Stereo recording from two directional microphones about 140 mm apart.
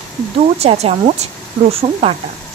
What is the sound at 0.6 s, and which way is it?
Speech, 45° right (ahead or behind).